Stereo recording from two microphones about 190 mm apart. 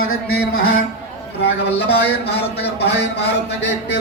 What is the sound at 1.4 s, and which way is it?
Speech, 60° left (ahead or behind).